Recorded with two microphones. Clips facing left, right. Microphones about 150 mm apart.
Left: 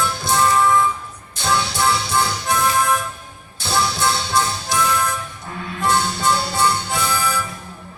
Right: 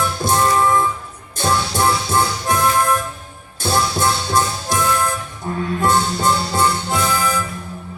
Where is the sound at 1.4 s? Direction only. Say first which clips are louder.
Right 2 dB; 50° right (ahead or behind).